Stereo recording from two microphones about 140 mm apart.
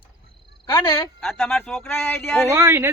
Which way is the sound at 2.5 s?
20° right (ahead or behind).